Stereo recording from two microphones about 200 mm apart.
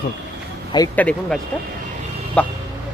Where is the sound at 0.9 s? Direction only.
5° left (ahead or behind).